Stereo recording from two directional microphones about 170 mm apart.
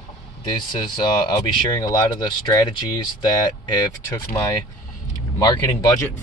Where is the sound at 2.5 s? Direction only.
25° left (ahead or behind).